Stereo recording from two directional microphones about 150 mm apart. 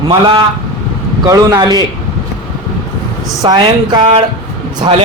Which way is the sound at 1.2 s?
25° right (ahead or behind).